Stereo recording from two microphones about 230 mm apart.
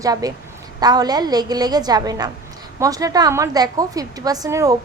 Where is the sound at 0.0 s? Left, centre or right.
Centre.